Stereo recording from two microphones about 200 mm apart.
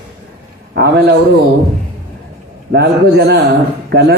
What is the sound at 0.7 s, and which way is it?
Speech, 55° right (ahead or behind).